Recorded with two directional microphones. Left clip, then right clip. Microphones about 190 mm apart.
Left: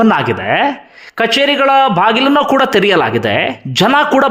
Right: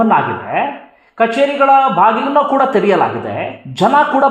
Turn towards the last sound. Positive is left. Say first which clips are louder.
# left 1 dB
turn(degrees=30)  # may be behind; listen again after turning